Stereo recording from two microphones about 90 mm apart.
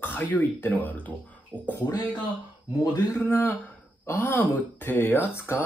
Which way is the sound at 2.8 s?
45° left (ahead or behind).